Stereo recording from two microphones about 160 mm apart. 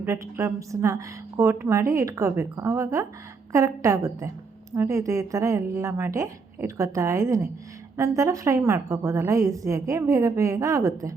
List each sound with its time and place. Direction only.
0.0 s a woman's voice: 15° right (ahead or behind)